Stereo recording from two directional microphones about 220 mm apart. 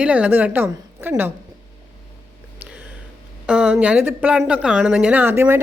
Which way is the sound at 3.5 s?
5° right (ahead or behind).